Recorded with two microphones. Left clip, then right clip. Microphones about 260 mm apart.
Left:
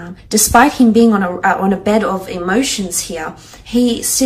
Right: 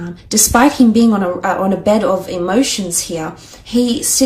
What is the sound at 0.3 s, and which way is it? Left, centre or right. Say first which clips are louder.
Speech: left 2 dB; right.